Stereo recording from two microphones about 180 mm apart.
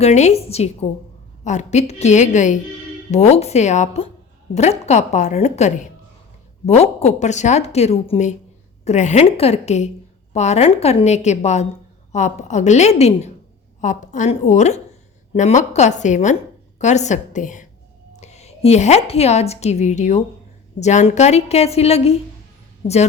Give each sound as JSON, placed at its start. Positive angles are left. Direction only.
{"t": 0.0, "sound": "a woman's voice", "side_deg": 40}